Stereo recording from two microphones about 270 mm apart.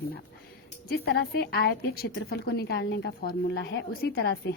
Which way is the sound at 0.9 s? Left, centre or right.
Left.